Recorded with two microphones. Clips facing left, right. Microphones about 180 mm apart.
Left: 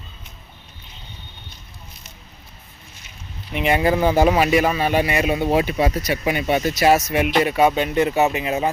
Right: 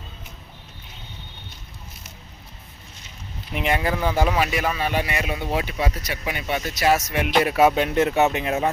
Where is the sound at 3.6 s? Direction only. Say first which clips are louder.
Left 4 dB; 5° left (ahead or behind).